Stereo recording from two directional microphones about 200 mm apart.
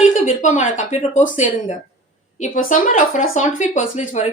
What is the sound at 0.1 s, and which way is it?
A woman's voice, 40° left (ahead or behind).